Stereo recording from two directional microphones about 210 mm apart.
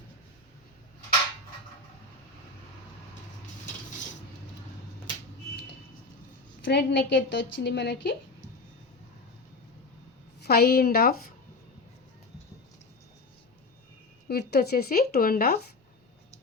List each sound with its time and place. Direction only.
6.7 s a woman's voice: 55° left (ahead or behind)
10.4 s speech: 50° left (ahead or behind)
14.3 s speech: 50° left (ahead or behind)